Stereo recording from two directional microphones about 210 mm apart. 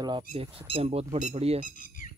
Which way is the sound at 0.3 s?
45° left (ahead or behind).